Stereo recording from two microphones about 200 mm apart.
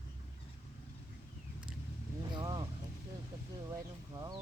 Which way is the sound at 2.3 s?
20° right (ahead or behind).